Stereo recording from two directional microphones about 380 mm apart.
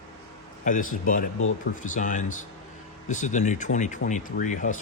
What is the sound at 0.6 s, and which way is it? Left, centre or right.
Speech, left.